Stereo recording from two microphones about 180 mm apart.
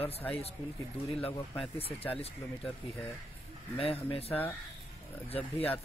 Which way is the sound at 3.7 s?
30° left (ahead or behind).